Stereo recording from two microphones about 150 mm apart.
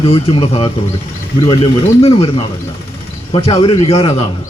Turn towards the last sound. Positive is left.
turn(degrees=40)  # may be behind; listen again after turning